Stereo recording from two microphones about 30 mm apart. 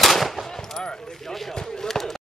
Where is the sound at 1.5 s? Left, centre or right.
Centre.